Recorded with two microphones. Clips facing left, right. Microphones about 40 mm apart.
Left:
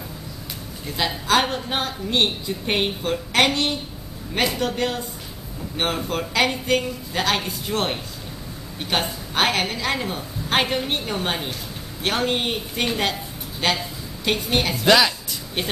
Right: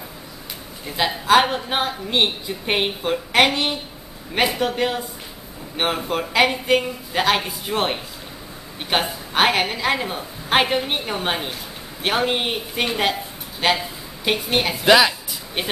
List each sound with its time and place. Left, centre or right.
0.8 s speech: centre